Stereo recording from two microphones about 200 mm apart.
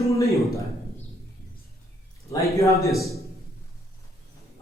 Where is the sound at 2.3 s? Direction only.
15° left (ahead or behind).